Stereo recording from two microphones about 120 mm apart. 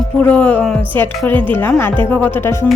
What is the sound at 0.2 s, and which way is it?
Speech, 15° left (ahead or behind).